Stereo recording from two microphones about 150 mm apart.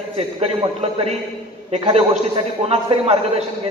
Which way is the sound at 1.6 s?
40° right (ahead or behind).